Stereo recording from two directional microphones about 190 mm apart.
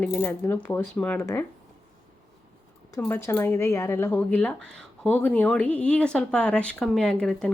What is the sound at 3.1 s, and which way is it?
Speech, 15° left (ahead or behind).